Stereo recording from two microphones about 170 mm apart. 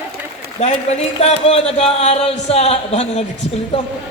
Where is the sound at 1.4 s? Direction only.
35° left (ahead or behind).